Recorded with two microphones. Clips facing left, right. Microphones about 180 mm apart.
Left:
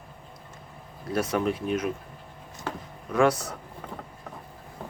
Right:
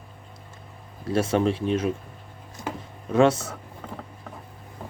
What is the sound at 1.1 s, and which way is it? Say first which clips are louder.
Speech: right 4 dB; 25° right (ahead or behind).